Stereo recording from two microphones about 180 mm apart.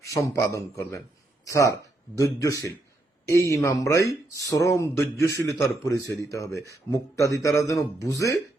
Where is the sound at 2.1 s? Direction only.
20° left (ahead or behind).